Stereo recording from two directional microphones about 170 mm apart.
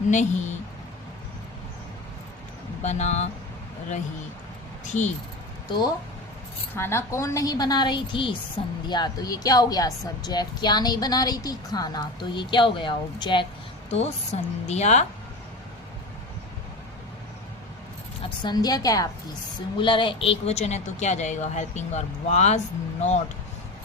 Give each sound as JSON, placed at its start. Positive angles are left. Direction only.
{"t": 0.1, "sound": "a woman's voice", "side_deg": 45}
{"t": 2.8, "sound": "a woman's voice", "side_deg": 40}
{"t": 4.9, "sound": "speech", "side_deg": 45}
{"t": 6.7, "sound": "a woman's voice", "side_deg": 15}
{"t": 13.9, "sound": "a woman's voice", "side_deg": 40}
{"t": 18.2, "sound": "a woman's voice", "side_deg": 25}